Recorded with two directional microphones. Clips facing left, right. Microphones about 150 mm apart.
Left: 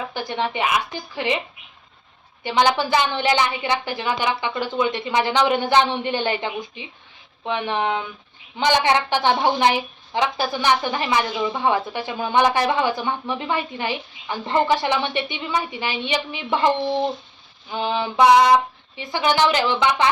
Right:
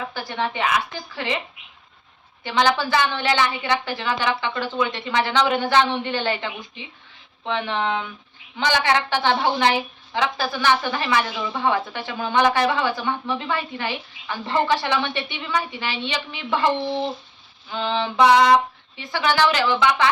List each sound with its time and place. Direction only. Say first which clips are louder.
0.1 s a woman's voice: left 2 dB; 15° left (ahead or behind)
2.4 s a woman's voice: left 1 dB; 15° left (ahead or behind)